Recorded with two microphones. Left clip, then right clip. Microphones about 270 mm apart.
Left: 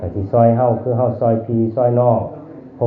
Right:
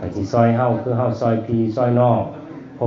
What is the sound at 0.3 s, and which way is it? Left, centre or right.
Speech, right.